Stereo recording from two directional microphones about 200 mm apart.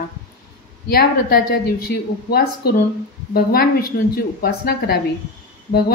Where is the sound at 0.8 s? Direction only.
50° left (ahead or behind).